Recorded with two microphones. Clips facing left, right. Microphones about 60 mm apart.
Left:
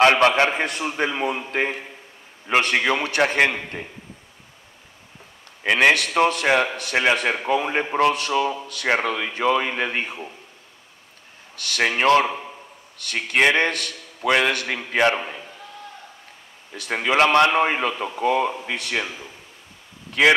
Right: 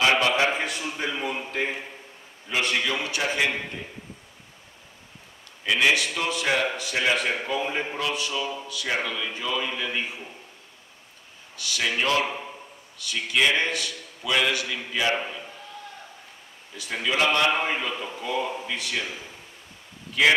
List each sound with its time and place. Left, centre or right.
0.0 s a man's voice: left
5.6 s a man's voice: left
11.5 s a man's voice: left
16.7 s a man's voice: left